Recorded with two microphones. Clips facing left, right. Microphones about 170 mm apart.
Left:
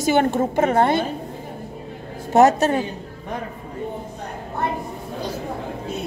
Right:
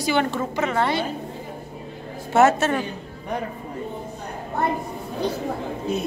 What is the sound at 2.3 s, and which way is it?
Speech, 40° left (ahead or behind).